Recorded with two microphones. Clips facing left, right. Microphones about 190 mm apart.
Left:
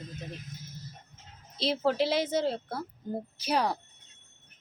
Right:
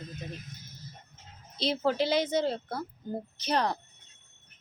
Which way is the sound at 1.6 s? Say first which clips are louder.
Left 1 dB; centre (ahead or behind).